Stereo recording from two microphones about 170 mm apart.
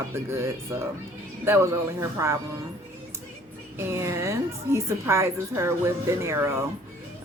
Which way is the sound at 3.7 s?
15° right (ahead or behind).